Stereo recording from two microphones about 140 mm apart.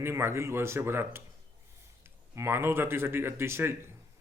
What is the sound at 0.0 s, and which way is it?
Speech, 15° right (ahead or behind).